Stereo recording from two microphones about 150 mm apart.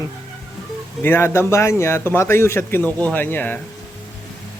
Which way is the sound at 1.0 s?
15° left (ahead or behind).